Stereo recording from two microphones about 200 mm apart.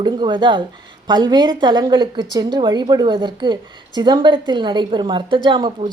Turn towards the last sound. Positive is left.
turn(degrees=-20)  # may be behind; listen again after turning